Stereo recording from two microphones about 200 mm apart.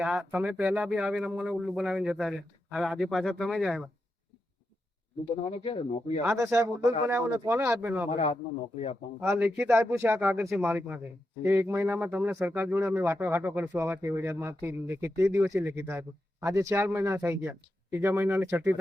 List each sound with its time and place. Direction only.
0.0 s speech: 5° right (ahead or behind)
5.5 s speech: 30° left (ahead or behind)
6.4 s speech: 15° right (ahead or behind)
8.1 s speech: 30° left (ahead or behind)
9.2 s speech: 10° right (ahead or behind)